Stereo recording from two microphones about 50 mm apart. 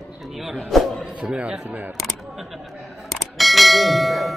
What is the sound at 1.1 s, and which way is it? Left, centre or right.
Speech, right.